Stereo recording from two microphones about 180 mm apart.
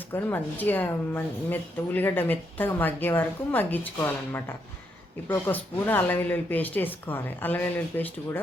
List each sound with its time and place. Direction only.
0.1 s a woman's voice: 10° left (ahead or behind)